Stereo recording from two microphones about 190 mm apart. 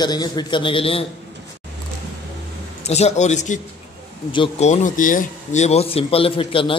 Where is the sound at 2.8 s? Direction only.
35° left (ahead or behind).